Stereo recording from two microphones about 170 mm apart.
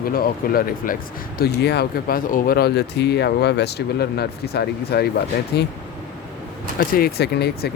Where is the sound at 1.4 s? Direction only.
75° left (ahead or behind).